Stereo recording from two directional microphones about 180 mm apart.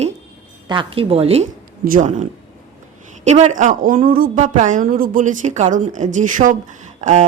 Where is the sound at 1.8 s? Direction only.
45° right (ahead or behind).